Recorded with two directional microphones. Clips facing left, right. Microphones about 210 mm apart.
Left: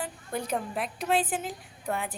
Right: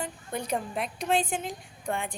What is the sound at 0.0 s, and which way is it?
A woman's voice, centre (ahead or behind).